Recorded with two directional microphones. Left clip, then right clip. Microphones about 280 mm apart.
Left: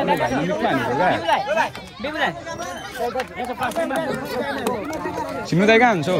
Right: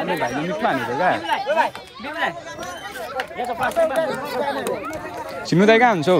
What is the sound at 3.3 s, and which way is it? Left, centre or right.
Speech, right.